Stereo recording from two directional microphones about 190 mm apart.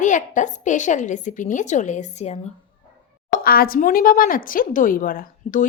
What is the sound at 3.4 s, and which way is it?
A woman's voice, 50° left (ahead or behind).